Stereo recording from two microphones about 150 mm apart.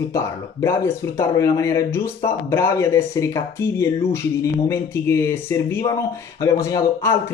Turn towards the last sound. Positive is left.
turn(degrees=20)  # may be behind; listen again after turning